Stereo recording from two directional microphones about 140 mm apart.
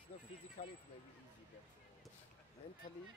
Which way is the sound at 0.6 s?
70° left (ahead or behind).